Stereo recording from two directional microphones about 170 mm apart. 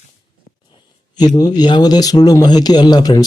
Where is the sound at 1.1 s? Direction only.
25° left (ahead or behind).